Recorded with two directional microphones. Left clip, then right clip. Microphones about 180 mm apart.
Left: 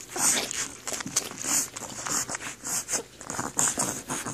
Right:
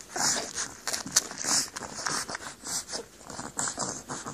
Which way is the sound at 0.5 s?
Centre (ahead or behind).